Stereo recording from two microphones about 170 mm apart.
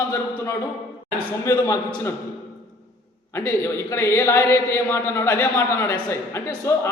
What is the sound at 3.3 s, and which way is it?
A man's voice, 15° left (ahead or behind).